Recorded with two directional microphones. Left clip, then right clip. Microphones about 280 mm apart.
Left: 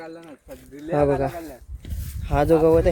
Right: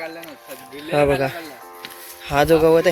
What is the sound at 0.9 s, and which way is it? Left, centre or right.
Speech, centre.